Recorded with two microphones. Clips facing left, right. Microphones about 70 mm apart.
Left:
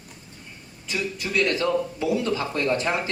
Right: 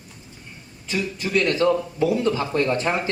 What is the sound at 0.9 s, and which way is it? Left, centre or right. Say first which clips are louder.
A man's voice: right 3 dB; right.